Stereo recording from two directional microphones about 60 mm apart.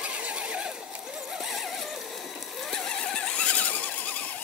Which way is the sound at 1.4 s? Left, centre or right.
Centre.